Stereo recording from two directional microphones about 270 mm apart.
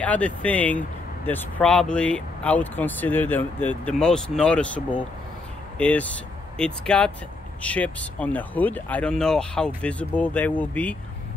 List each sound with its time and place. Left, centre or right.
0.0 s speech: centre